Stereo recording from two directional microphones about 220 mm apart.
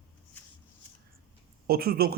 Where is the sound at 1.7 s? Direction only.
45° right (ahead or behind).